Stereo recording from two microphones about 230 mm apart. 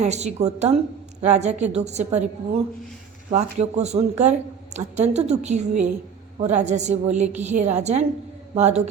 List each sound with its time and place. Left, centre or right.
0.0 s a woman's voice: right
3.2 s a woman's voice: right